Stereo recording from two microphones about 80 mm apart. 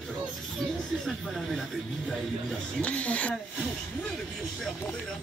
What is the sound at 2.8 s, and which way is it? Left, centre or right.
Speech, centre.